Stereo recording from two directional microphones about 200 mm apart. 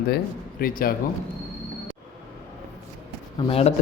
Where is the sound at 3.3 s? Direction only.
30° left (ahead or behind).